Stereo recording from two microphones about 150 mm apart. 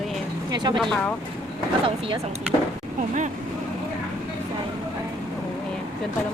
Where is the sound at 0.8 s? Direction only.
Centre (ahead or behind).